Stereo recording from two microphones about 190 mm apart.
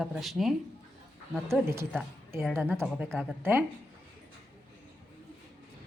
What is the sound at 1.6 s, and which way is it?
A woman's voice, 15° right (ahead or behind).